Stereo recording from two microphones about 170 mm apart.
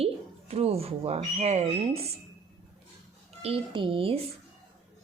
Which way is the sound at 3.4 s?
30° right (ahead or behind).